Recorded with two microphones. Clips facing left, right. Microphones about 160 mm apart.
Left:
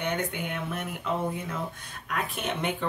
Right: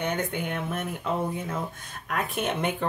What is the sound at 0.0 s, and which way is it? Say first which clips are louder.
Speech: right 2 dB; 40° right (ahead or behind).